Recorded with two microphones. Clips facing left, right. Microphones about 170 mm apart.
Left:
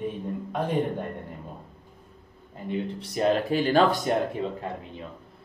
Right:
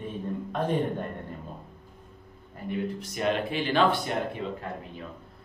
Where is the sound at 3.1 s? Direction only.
35° left (ahead or behind).